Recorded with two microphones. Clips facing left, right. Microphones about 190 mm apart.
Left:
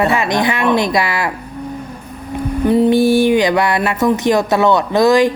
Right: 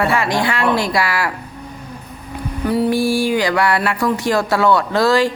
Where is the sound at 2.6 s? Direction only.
20° left (ahead or behind).